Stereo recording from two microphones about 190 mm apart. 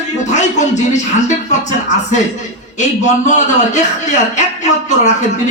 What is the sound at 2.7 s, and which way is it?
A man's voice, 40° left (ahead or behind).